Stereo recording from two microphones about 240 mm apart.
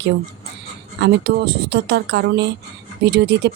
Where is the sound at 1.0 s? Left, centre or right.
Right.